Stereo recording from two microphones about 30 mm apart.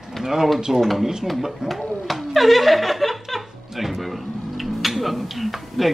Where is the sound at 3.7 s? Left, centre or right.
Centre.